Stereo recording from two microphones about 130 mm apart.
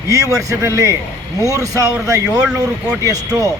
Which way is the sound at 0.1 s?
25° right (ahead or behind).